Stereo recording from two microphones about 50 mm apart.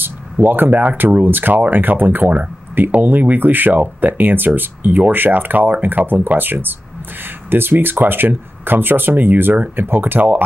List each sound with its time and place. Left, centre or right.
0.0 s speech: right